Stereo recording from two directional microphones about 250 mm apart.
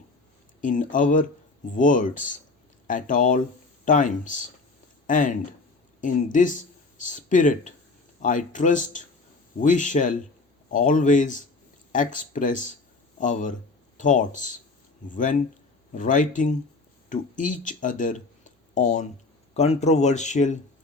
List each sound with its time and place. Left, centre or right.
0.6 s speech: left